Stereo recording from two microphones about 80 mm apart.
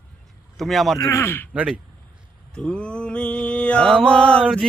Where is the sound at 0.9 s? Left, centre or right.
Left.